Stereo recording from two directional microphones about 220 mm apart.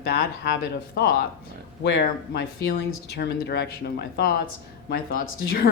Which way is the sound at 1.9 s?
50° left (ahead or behind).